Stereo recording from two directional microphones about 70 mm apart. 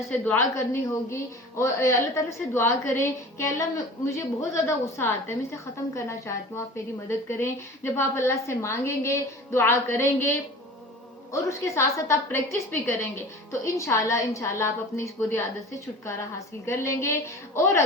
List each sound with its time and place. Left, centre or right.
0.5 s a woman's voice: left
11.3 s a woman's voice: left
16.6 s a woman's voice: left